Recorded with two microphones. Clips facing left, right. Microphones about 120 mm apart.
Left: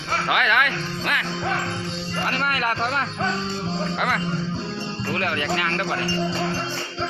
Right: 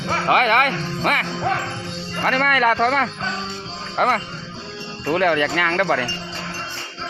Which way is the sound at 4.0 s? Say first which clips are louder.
Right 8 dB; 40° right (ahead or behind).